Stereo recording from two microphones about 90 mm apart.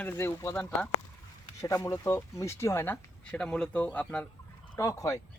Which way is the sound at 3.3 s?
10° left (ahead or behind).